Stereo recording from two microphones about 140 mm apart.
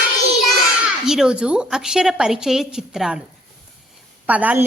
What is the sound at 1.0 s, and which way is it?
A woman's voice, 5° right (ahead or behind).